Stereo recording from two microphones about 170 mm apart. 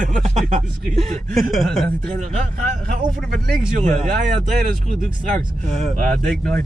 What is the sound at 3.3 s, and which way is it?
Speech, 55° right (ahead or behind).